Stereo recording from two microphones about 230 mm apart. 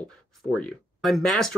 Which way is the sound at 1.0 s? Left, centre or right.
Centre.